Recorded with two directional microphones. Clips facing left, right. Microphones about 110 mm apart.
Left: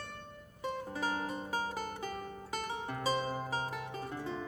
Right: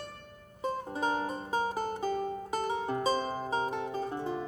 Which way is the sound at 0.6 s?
30° right (ahead or behind).